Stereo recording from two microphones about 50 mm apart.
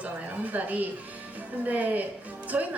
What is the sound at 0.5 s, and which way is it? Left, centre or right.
A woman's voice, right.